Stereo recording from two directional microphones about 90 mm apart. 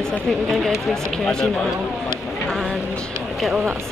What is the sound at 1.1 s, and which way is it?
Speech, 5° left (ahead or behind).